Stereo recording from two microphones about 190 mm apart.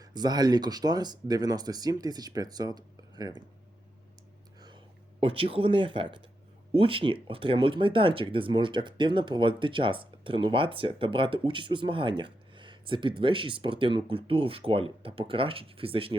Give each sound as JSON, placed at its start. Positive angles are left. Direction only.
{"t": 0.0, "sound": "speech", "side_deg": -20}
{"t": 5.2, "sound": "speech", "side_deg": -30}